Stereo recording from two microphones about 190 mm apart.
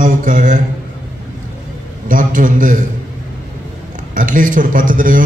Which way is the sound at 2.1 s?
45° right (ahead or behind).